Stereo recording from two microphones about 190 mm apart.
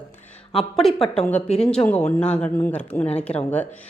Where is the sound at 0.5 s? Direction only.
Centre (ahead or behind).